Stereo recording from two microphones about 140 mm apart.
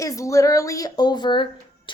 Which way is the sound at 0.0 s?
25° left (ahead or behind).